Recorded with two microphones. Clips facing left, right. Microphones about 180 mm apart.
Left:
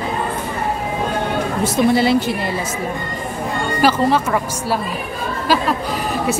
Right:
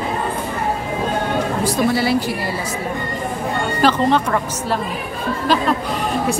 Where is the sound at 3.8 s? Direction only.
10° left (ahead or behind).